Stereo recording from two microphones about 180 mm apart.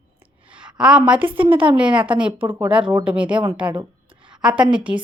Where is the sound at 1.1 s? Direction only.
10° right (ahead or behind).